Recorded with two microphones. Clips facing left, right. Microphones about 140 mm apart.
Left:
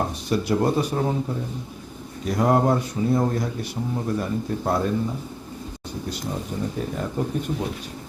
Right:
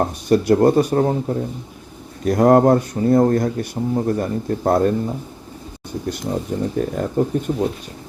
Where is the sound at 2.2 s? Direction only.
50° right (ahead or behind).